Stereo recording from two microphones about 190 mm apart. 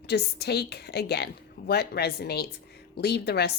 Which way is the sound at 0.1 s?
60° left (ahead or behind).